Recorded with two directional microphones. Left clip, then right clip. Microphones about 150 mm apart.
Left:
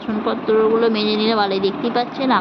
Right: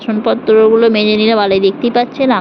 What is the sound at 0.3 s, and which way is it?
Speech, 40° right (ahead or behind).